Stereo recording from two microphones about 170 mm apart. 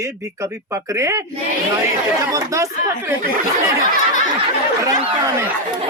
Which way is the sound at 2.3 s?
20° right (ahead or behind).